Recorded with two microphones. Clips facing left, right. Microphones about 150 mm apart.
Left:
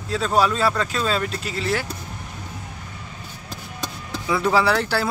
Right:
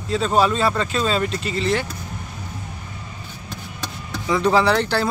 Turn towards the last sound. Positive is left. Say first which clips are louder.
# right 2 dB
turn(degrees=5)  # may be behind; listen again after turning